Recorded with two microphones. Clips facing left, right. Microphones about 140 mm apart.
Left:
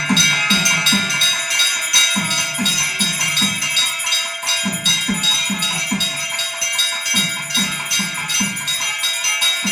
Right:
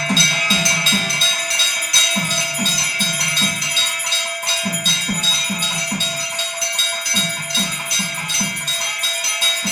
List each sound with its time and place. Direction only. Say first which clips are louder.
0.1 s music: left 4 dB; 35° right (ahead or behind)